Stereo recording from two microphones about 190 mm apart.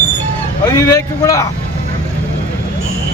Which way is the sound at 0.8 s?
15° left (ahead or behind).